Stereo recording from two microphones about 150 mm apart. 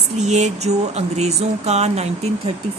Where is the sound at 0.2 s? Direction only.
50° right (ahead or behind).